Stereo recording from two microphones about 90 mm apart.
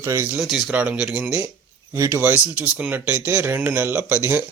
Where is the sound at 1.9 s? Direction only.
30° right (ahead or behind).